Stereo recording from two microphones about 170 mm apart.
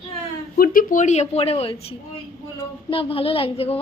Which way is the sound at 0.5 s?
55° left (ahead or behind).